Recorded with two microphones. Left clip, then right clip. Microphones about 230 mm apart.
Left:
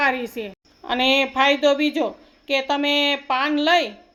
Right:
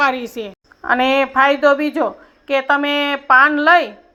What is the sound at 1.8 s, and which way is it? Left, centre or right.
Speech, right.